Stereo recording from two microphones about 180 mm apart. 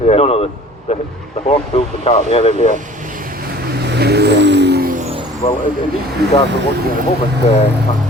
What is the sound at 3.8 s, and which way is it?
Vehicle, 65° right (ahead or behind).